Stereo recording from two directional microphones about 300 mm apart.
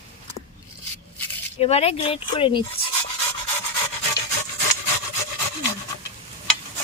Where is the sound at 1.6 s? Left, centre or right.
Centre.